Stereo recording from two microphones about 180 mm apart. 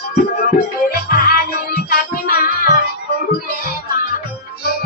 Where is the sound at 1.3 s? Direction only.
55° left (ahead or behind).